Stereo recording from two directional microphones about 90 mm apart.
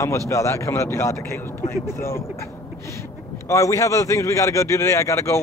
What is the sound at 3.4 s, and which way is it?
Speech, 35° left (ahead or behind).